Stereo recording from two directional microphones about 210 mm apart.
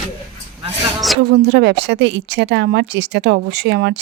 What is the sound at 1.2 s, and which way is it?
A woman's voice, 50° right (ahead or behind).